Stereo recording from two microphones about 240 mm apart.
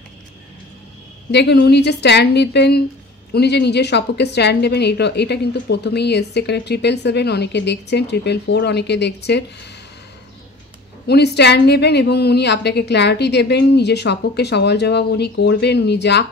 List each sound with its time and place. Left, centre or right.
1.3 s a woman's voice: left
11.1 s a woman's voice: left